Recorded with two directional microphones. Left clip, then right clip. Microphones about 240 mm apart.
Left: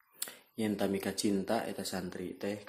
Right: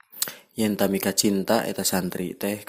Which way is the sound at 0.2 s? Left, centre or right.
Right.